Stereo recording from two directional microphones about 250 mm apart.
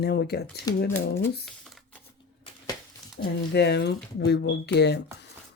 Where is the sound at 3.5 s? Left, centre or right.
Left.